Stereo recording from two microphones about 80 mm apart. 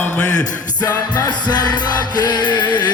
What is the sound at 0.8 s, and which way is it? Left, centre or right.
Music, left.